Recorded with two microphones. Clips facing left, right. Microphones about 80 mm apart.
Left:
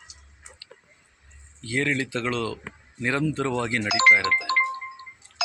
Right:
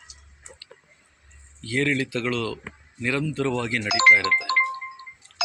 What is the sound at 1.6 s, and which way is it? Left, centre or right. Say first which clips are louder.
Speech: right 2 dB; left.